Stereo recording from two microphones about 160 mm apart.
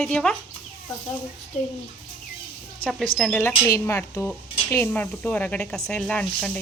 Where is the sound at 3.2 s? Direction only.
5° left (ahead or behind).